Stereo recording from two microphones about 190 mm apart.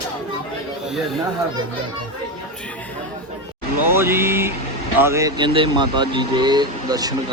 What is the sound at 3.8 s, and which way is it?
Speech, 10° right (ahead or behind).